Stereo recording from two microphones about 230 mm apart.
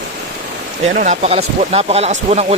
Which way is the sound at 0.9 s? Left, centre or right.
Right.